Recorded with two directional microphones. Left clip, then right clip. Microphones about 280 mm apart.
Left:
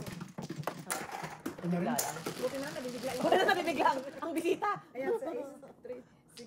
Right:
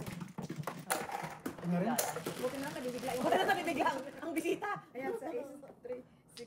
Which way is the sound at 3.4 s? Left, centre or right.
Left.